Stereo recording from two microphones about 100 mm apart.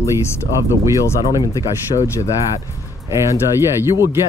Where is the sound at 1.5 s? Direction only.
35° left (ahead or behind).